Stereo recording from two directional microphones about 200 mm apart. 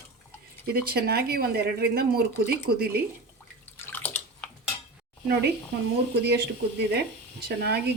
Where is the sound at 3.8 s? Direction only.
10° left (ahead or behind).